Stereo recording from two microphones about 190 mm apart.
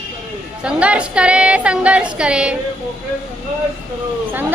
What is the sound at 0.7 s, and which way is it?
A woman's voice, 5° right (ahead or behind).